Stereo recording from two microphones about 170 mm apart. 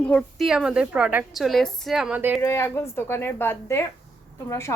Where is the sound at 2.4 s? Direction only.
15° left (ahead or behind).